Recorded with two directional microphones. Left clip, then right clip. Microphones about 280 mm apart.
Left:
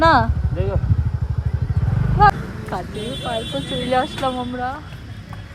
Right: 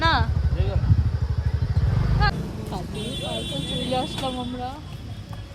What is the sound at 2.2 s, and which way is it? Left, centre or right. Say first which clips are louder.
A woman's voice: left 13 dB; centre.